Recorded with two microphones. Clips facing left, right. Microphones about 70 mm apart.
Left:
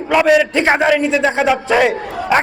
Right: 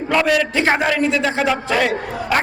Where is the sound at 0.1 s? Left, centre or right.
Centre.